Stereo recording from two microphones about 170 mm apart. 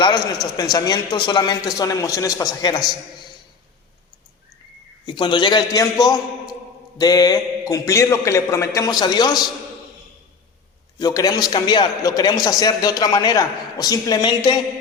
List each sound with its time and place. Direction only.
0.5 s a man's voice: 20° left (ahead or behind)
5.0 s a man's voice: 30° left (ahead or behind)
11.0 s a man's voice: 20° left (ahead or behind)